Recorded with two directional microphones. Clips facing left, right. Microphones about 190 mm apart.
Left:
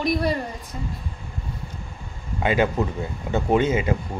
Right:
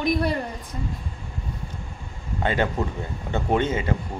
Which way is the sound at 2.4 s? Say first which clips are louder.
Left 3 dB; 10° left (ahead or behind).